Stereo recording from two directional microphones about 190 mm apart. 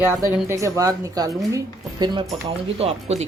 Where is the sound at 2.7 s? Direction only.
35° right (ahead or behind).